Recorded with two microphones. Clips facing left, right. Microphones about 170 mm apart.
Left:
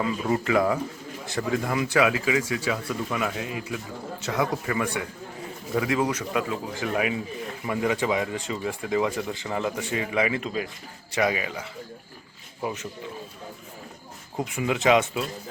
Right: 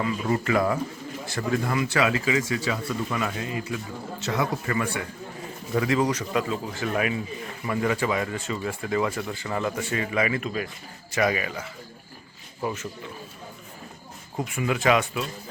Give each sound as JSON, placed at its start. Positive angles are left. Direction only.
{"t": 0.3, "sound": "speech", "side_deg": 15}
{"t": 12.6, "sound": "speech", "side_deg": 15}
{"t": 14.3, "sound": "speech", "side_deg": 20}